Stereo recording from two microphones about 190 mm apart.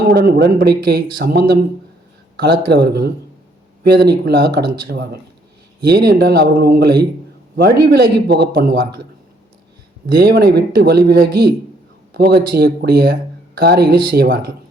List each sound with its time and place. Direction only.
0.1 s speech: 60° right (ahead or behind)
10.1 s speech: 55° right (ahead or behind)